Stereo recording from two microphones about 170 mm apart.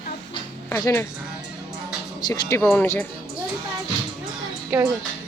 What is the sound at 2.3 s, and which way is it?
Speech, 15° left (ahead or behind).